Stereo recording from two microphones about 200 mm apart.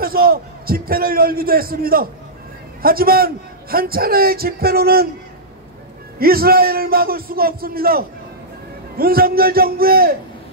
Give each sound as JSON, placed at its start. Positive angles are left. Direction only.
{"t": 0.0, "sound": "a man's voice", "side_deg": -45}
{"t": 6.1, "sound": "a man's voice", "side_deg": -50}